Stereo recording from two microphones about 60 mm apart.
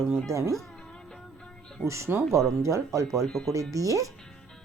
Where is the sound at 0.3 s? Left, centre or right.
Right.